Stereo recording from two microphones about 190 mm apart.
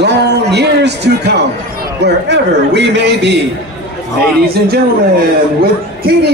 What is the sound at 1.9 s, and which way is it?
A man's voice, 60° right (ahead or behind).